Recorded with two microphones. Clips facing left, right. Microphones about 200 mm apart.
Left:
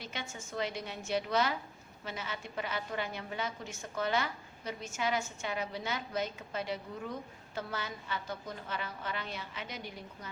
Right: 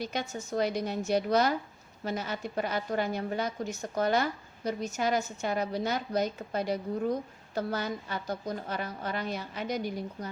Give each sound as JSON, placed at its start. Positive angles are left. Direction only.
{"t": 0.0, "sound": "a woman's voice", "side_deg": -40}